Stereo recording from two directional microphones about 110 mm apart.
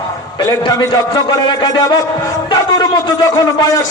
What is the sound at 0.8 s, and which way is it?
A man's voice, 35° left (ahead or behind).